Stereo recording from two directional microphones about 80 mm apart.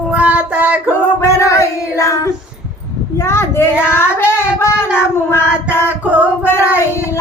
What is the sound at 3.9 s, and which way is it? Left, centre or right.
Child singing, left.